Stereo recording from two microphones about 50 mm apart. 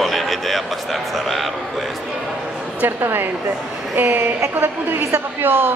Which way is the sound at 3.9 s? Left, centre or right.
Right.